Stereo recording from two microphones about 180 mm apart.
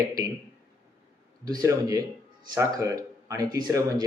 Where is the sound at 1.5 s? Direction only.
20° right (ahead or behind).